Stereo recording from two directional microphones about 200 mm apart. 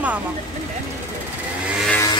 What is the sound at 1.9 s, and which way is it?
Vehicle, 15° left (ahead or behind).